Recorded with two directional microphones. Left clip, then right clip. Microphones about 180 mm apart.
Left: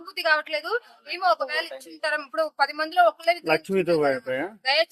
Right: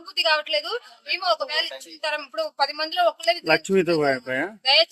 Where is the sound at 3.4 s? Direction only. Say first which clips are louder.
Right 3 dB; 35° right (ahead or behind).